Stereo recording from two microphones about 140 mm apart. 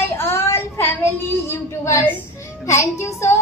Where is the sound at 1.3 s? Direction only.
20° left (ahead or behind).